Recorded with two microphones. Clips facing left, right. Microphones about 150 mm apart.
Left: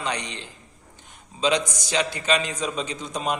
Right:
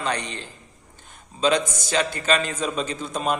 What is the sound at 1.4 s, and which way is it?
A man's voice, 15° left (ahead or behind).